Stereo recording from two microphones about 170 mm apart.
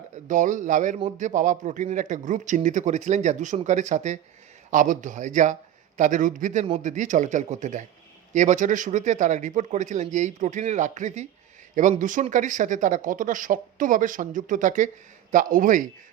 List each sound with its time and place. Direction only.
0.3 s speech: 50° right (ahead or behind)